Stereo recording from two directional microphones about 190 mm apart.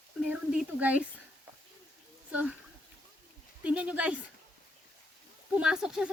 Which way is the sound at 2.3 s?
5° right (ahead or behind).